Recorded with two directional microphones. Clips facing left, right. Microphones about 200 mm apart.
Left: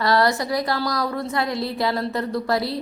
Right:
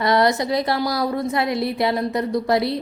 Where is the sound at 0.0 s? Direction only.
20° right (ahead or behind).